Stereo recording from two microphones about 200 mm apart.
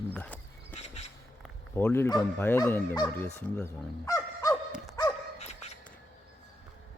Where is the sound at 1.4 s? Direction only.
10° left (ahead or behind).